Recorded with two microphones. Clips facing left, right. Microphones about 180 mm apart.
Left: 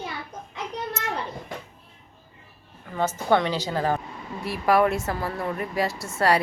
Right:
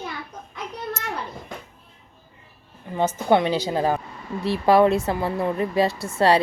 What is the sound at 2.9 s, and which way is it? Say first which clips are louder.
A woman's voice: right 3 dB; 20° right (ahead or behind).